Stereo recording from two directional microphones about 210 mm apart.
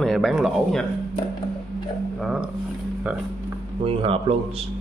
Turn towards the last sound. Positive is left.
turn(degrees=-25)  # may be behind; listen again after turning